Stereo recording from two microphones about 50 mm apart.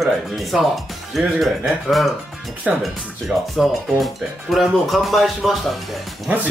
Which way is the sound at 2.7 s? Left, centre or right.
Right.